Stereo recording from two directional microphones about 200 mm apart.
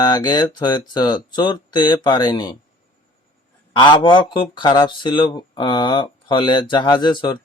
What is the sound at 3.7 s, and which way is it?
Speech, 25° left (ahead or behind).